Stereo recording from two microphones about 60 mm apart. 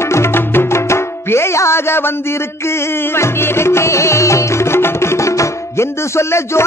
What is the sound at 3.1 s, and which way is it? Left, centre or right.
Music, left.